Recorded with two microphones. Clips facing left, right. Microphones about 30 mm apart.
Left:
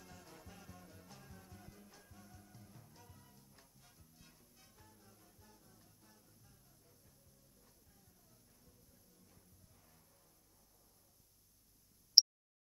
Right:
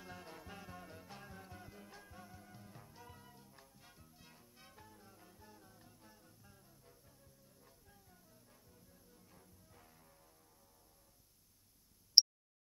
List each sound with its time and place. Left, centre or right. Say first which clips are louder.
0.0 s music: right 5 dB; right
9.4 s music: right 5 dB; right
9.8 s music: right 4 dB; right